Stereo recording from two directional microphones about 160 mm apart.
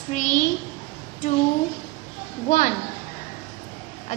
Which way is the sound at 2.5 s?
50° left (ahead or behind).